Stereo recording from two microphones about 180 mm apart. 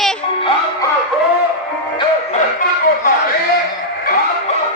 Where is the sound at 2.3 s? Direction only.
45° left (ahead or behind).